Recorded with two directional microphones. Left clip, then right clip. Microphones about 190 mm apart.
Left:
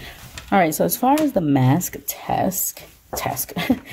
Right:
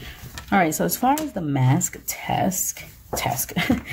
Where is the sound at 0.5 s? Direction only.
35° left (ahead or behind).